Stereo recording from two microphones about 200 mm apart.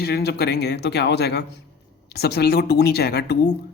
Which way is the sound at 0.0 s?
55° left (ahead or behind).